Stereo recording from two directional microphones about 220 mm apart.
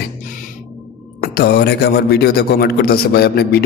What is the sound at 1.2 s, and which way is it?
A man's voice, 45° left (ahead or behind).